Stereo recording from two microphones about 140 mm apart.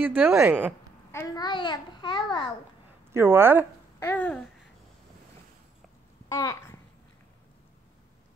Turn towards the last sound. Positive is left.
turn(degrees=25)  # may be behind; listen again after turning